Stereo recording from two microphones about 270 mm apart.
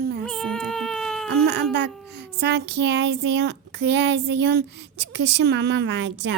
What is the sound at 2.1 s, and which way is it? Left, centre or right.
Speech, right.